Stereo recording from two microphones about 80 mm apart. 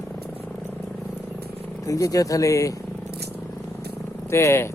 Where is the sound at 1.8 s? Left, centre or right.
Left.